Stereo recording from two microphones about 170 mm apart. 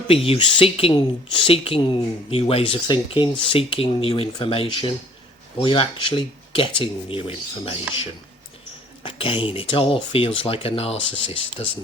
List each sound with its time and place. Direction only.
0.1 s speech: 35° left (ahead or behind)
9.0 s speech: 30° left (ahead or behind)